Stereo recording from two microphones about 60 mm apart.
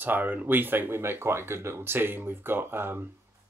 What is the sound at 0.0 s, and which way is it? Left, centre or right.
Speech, right.